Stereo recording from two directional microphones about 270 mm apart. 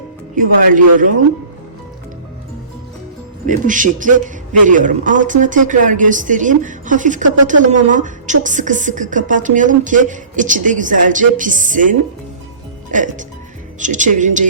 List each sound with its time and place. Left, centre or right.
0.3 s speech: right
3.4 s speech: right